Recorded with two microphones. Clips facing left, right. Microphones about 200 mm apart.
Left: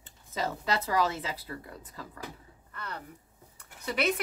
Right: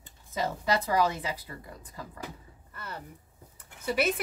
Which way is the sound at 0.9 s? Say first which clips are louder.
Right 2 dB; 15° right (ahead or behind).